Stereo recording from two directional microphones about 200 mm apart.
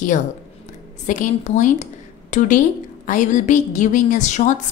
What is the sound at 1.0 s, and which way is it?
A woman's voice, 40° left (ahead or behind).